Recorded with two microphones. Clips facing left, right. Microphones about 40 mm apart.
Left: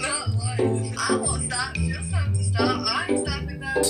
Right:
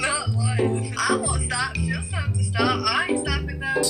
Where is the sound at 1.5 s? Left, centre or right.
Right.